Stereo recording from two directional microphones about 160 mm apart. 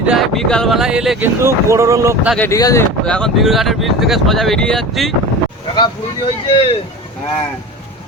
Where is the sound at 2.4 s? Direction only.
20° left (ahead or behind).